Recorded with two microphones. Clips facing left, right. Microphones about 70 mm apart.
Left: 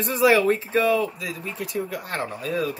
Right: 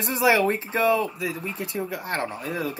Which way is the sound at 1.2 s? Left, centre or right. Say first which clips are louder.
Right 2 dB; right.